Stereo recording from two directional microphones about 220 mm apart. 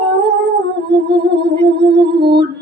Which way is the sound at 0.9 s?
50° right (ahead or behind).